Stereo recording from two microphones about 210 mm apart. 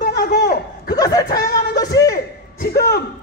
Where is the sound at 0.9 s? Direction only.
15° left (ahead or behind).